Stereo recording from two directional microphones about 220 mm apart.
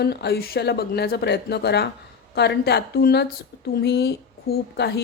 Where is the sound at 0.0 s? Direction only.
45° left (ahead or behind).